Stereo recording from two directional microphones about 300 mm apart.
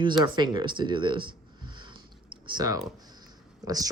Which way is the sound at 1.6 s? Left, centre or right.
Centre.